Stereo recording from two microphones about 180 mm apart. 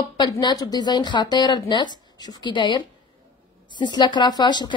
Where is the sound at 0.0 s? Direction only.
20° left (ahead or behind).